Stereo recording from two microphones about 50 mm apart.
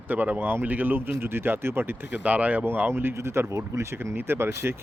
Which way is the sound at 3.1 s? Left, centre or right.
Right.